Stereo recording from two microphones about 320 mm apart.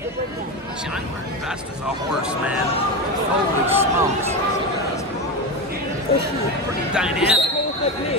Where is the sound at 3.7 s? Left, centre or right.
Centre.